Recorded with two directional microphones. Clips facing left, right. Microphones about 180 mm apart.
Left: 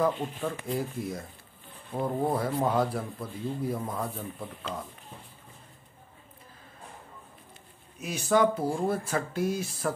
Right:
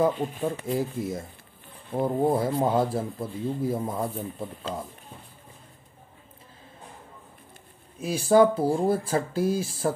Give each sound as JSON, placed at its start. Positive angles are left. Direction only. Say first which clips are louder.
{"t": 0.5, "sound": "speech", "louder": "right 3 dB", "side_deg": -25}
{"t": 8.0, "sound": "speech", "louder": "right 5 dB", "side_deg": -30}